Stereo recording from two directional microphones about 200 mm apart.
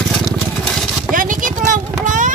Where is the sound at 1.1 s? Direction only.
40° right (ahead or behind).